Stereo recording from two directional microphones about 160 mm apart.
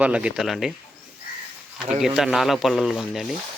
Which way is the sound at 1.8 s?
5° right (ahead or behind).